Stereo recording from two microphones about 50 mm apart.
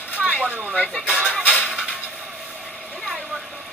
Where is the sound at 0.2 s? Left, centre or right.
Right.